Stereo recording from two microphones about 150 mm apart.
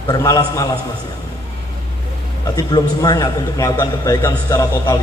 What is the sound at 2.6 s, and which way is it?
A man's voice, 25° left (ahead or behind).